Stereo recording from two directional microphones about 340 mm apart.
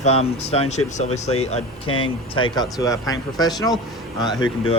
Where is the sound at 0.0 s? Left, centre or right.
Centre.